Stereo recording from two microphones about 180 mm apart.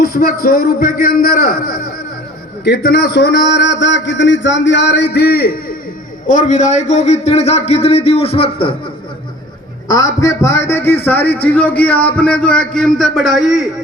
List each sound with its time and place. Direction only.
0.0 s a man's voice: 55° left (ahead or behind)
6.2 s a man's voice: 45° left (ahead or behind)
9.9 s a man's voice: 20° left (ahead or behind); by 13.7 s centre (ahead or behind)